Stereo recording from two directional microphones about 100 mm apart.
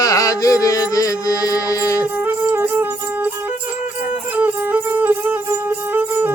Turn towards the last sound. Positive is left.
turn(degrees=-15)  # may be behind; listen again after turning